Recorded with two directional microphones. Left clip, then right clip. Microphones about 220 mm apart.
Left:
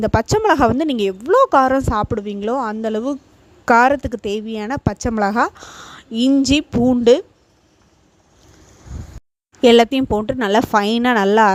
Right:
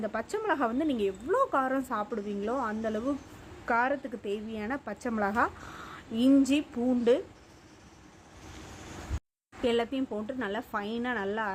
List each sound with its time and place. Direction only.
0.0 s a woman's voice: 50° left (ahead or behind)
9.6 s a woman's voice: 50° left (ahead or behind)